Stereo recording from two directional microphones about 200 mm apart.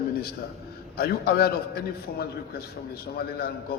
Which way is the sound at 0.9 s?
50° left (ahead or behind).